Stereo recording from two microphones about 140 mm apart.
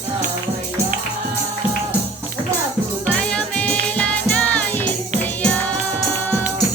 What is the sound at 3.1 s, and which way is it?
Music, 5° left (ahead or behind).